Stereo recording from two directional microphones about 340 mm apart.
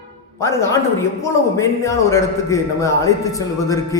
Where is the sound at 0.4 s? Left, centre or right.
Centre.